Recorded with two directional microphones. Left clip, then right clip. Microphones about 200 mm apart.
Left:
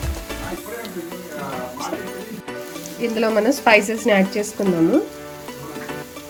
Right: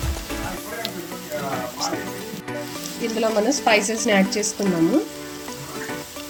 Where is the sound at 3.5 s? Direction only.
5° left (ahead or behind).